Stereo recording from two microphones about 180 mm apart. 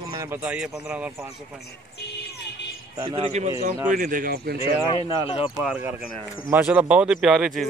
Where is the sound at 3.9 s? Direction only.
50° right (ahead or behind).